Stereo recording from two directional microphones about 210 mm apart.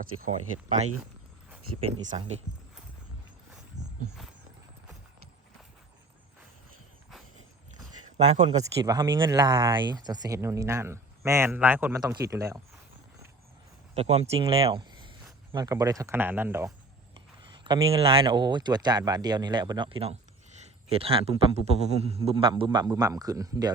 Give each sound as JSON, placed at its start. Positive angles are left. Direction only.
{"t": 1.9, "sound": "speech", "side_deg": -25}
{"t": 3.8, "sound": "wild animals", "side_deg": -15}
{"t": 8.4, "sound": "speech", "side_deg": -25}
{"t": 13.9, "sound": "speech", "side_deg": -30}
{"t": 17.2, "sound": "speech", "side_deg": -20}